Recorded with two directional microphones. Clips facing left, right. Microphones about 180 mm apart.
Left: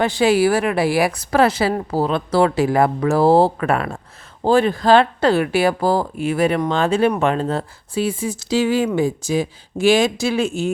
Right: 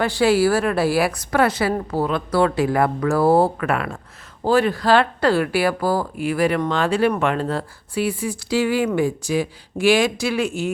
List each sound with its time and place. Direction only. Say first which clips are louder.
0.0 s speech: left 1 dB; 20° left (ahead or behind)
1.3 s speech: left 3 dB; 30° left (ahead or behind)